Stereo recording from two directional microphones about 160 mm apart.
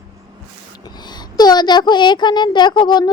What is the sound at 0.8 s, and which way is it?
Speech, 25° left (ahead or behind).